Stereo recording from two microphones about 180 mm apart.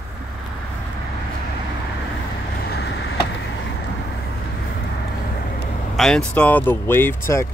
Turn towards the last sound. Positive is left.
turn(degrees=15)  # may be behind; listen again after turning